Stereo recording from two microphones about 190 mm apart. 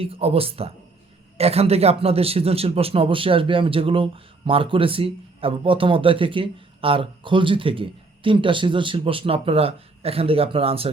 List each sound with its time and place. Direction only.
0.0 s speech: 30° right (ahead or behind)